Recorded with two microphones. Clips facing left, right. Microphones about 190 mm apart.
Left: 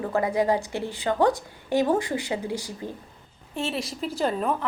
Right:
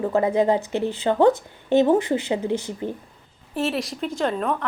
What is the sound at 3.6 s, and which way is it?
Speech, centre (ahead or behind).